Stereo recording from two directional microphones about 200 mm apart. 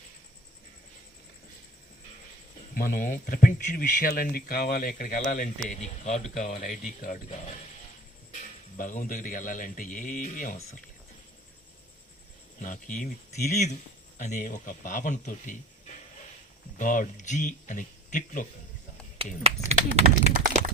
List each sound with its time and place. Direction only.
2.7 s a man's voice: 45° left (ahead or behind)
8.8 s a man's voice: 40° left (ahead or behind)
12.6 s a man's voice: 40° left (ahead or behind)
16.7 s a man's voice: 40° left (ahead or behind)
19.2 s speech: 30° right (ahead or behind)